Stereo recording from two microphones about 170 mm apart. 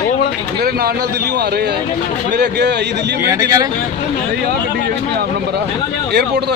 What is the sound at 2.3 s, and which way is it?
Speech, 80° right.